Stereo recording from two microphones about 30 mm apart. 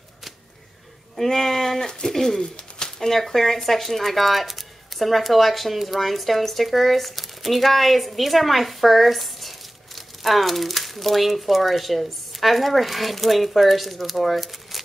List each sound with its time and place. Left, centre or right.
1.1 s speech: centre
2.8 s a sound: centre
3.2 s speech: centre